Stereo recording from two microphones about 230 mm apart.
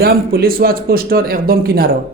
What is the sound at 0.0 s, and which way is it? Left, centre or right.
A man's voice, right.